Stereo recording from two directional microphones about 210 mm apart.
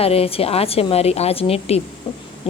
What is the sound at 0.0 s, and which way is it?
A woman's voice, 30° left (ahead or behind).